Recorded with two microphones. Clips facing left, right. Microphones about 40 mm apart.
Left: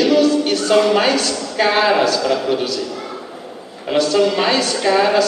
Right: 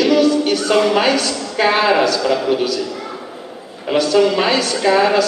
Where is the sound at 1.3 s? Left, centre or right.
Centre.